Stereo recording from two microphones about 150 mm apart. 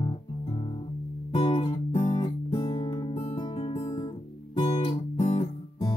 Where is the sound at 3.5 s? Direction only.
45° left (ahead or behind).